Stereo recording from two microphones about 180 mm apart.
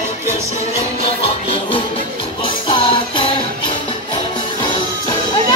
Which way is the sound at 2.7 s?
30° left (ahead or behind).